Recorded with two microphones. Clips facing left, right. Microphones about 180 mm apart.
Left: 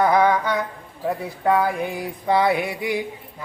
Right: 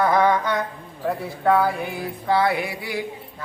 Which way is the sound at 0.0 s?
15° left (ahead or behind).